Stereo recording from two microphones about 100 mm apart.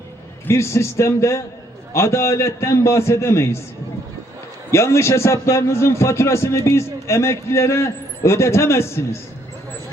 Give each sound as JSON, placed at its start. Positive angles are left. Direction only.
{"t": 0.4, "sound": "a man's voice", "side_deg": 25}
{"t": 4.7, "sound": "a man's voice", "side_deg": 30}